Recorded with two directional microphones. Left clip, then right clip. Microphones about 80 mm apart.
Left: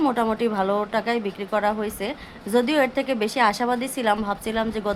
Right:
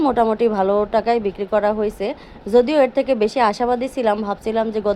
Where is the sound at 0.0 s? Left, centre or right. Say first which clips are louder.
Right 6 dB; right.